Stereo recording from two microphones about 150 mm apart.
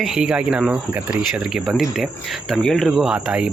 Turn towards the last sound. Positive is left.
turn(degrees=-5)  # may be behind; listen again after turning